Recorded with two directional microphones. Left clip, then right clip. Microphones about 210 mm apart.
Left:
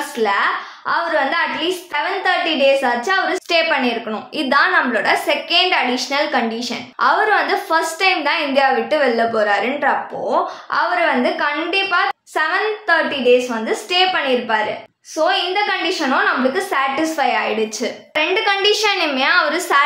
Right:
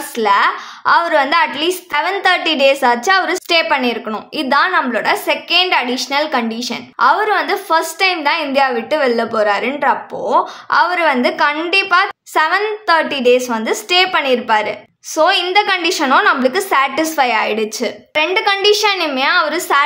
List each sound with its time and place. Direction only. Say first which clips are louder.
0.2 s a woman's voice: right 4 dB; 35° right (ahead or behind)